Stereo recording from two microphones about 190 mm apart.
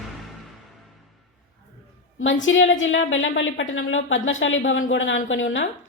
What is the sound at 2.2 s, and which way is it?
Speech, 90° left.